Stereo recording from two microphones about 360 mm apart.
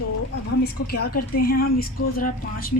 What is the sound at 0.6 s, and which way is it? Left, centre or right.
Speech, left.